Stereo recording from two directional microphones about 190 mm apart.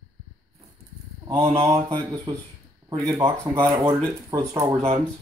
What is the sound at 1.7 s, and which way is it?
Speech, 20° right (ahead or behind).